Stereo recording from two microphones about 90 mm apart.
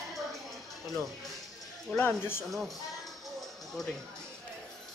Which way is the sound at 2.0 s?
25° left (ahead or behind).